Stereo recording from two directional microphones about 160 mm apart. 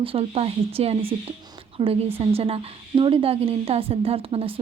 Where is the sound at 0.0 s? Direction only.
35° right (ahead or behind).